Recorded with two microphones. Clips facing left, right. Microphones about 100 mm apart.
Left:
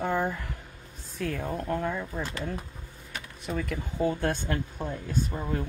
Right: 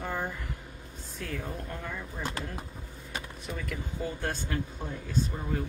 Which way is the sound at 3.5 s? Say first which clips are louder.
Left 6 dB; 50° left (ahead or behind).